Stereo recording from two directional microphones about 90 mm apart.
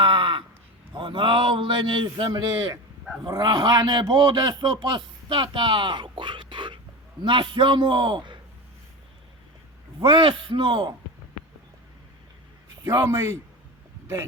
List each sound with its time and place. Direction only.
0.0 s a sound: 70° right (ahead or behind)
0.9 s a man's voice: 70° right (ahead or behind)
10.0 s a man's voice: 70° right (ahead or behind)
12.8 s a man's voice: 35° right (ahead or behind)